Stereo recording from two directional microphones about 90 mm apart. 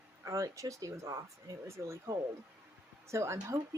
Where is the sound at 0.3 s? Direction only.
35° right (ahead or behind).